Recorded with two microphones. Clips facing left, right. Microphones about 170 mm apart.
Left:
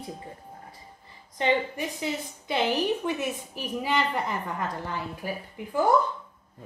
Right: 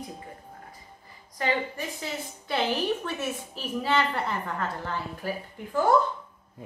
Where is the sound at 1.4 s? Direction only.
15° left (ahead or behind).